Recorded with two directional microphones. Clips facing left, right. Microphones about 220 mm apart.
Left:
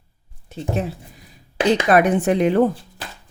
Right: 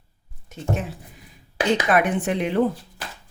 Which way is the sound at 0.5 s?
35° left (ahead or behind).